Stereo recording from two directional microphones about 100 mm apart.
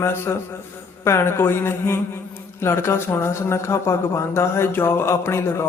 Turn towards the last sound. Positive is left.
turn(degrees=25)  # may be behind; listen again after turning